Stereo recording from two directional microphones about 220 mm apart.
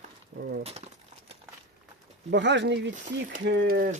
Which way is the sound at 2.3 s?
55° right (ahead or behind).